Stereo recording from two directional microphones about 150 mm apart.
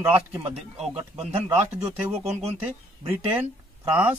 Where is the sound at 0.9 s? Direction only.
45° right (ahead or behind).